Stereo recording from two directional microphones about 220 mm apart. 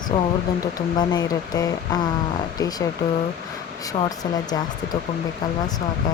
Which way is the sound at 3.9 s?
15° left (ahead or behind).